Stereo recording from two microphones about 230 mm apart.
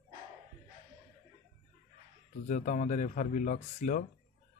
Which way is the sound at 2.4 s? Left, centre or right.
Left.